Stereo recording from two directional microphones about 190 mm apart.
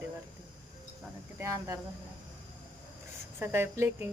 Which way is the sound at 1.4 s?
15° right (ahead or behind).